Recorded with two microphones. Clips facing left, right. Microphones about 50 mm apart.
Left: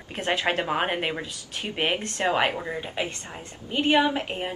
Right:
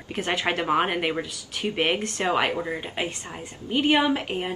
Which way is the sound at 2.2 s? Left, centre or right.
Left.